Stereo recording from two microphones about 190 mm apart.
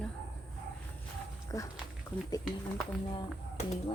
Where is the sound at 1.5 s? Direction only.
15° left (ahead or behind).